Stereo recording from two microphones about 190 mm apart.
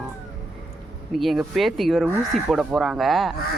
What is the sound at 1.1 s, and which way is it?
Speech, centre (ahead or behind).